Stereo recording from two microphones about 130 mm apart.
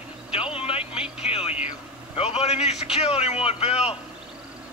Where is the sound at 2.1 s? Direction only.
50° left (ahead or behind).